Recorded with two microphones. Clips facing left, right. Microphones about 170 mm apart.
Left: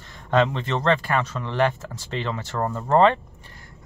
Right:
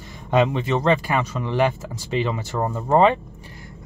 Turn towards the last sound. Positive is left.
turn(degrees=-10)  # may be behind; listen again after turning